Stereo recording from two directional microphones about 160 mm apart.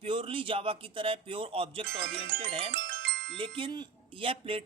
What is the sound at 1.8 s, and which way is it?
Music, 90° right.